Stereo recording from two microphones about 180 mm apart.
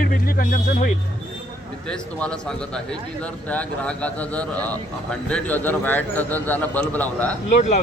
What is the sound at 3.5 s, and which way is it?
A man's voice, 5° left (ahead or behind).